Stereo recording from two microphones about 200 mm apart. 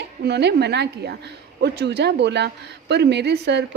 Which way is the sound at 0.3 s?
55° right (ahead or behind).